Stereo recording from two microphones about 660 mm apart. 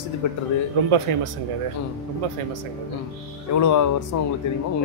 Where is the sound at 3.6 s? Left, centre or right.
Left.